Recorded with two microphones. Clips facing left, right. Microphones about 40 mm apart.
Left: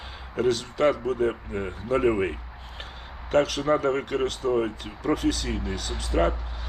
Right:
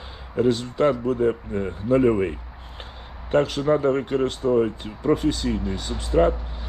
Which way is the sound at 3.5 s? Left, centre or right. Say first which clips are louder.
Right 3 dB; left.